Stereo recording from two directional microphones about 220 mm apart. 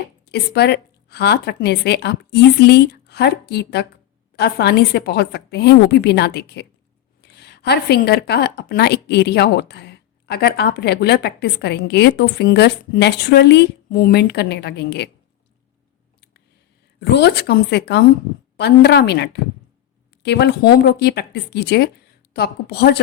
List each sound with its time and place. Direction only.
0.3 s a woman's voice: 50° left (ahead or behind)
17.0 s a woman's voice: 50° left (ahead or behind)